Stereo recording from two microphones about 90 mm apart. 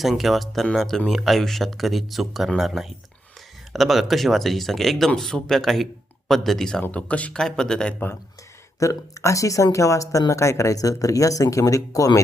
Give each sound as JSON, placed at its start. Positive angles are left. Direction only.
{"t": 0.0, "sound": "speech", "side_deg": 0}
{"t": 8.8, "sound": "speech", "side_deg": 35}